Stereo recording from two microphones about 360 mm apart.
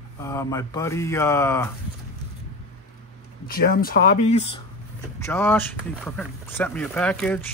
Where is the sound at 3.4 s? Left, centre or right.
Left.